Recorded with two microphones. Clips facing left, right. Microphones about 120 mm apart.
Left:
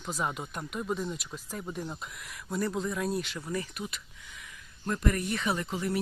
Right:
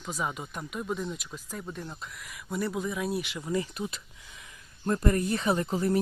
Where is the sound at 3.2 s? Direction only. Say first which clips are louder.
Right 4 dB; 15° right (ahead or behind).